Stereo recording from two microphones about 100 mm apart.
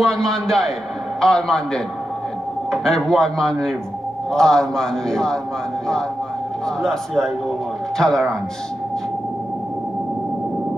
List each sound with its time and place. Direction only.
0.0 s a man's voice: 5° left (ahead or behind)
6.8 s a man's voice: 5° left (ahead or behind)